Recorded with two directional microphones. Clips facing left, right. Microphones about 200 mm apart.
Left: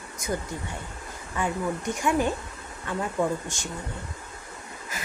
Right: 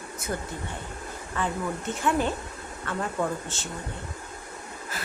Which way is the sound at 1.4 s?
10° left (ahead or behind).